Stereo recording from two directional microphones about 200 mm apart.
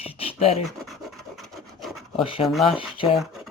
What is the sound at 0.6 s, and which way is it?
Scratch, centre (ahead or behind).